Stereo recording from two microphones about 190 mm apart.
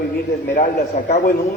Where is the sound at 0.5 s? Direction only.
40° left (ahead or behind).